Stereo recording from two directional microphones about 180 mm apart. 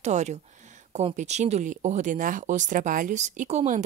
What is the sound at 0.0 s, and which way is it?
Speech, 40° right (ahead or behind).